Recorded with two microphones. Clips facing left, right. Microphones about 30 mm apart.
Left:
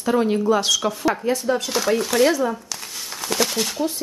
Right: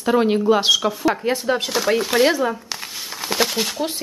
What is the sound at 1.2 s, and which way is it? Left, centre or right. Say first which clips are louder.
Speech: right 1 dB; right.